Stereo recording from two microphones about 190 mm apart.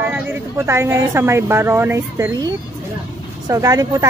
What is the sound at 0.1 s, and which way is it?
Speech, 15° right (ahead or behind).